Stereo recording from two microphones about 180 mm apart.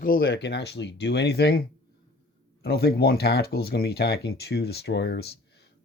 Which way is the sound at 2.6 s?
60° left (ahead or behind).